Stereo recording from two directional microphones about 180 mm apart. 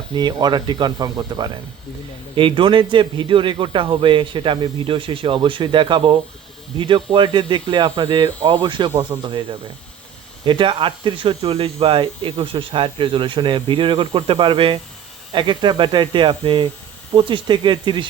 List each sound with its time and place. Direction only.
0.1 s speech: 25° right (ahead or behind)
10.4 s speech: 25° right (ahead or behind)